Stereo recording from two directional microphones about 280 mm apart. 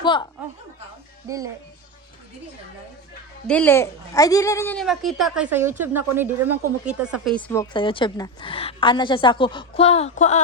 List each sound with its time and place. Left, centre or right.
0.0 s speech: centre
3.4 s a woman's voice: centre; by 10.4 s left